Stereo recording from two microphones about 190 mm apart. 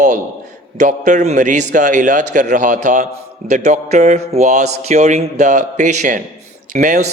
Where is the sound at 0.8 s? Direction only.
40° right (ahead or behind).